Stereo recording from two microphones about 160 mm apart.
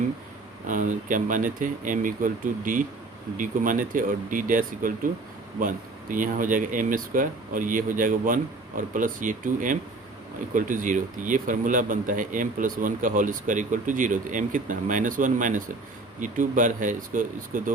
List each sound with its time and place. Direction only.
0.7 s speech: 55° right (ahead or behind)